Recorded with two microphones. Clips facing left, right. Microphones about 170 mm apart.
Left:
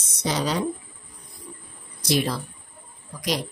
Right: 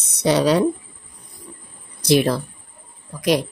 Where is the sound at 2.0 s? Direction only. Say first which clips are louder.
Right 7 dB; 60° right (ahead or behind).